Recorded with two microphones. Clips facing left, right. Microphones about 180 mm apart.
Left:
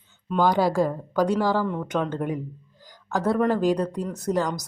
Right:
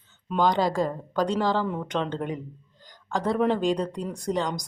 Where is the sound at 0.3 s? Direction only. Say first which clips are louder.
Left 2 dB; 10° left (ahead or behind).